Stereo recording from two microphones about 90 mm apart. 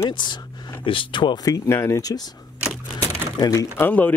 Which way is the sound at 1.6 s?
30° left (ahead or behind).